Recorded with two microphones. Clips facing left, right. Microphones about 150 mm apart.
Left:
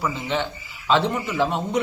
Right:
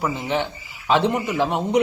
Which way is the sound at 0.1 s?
15° right (ahead or behind).